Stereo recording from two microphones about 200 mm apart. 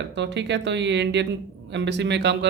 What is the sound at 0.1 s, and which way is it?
Speech, 60° right (ahead or behind).